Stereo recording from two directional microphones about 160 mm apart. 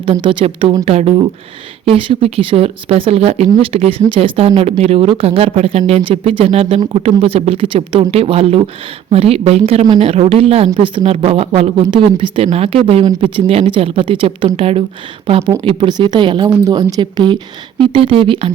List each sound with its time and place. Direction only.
0.0 s a woman's voice: 30° right (ahead or behind)